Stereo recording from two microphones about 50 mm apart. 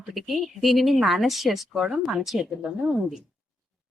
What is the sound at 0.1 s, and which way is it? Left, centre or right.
Speech, centre.